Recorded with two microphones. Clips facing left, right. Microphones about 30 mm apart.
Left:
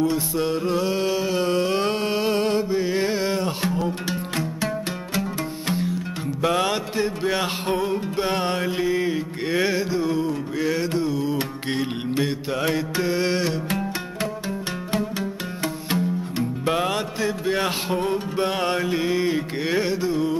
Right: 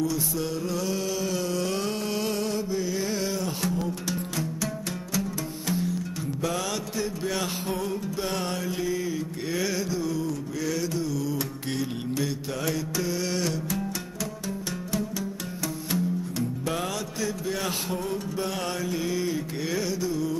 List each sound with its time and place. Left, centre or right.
0.0 s music: left
5.7 s music: left
14.9 s music: left